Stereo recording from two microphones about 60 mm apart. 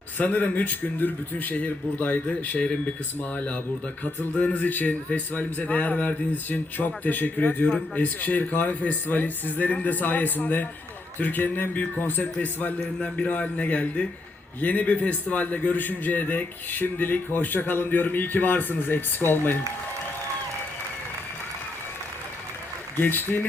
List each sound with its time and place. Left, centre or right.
0.2 s a man's voice: left
23.0 s a man's voice: left